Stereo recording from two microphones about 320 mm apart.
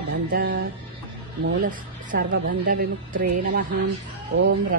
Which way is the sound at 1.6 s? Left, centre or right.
Right.